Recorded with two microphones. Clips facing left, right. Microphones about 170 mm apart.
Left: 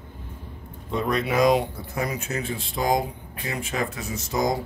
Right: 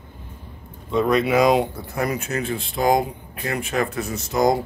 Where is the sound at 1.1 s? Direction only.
70° right (ahead or behind).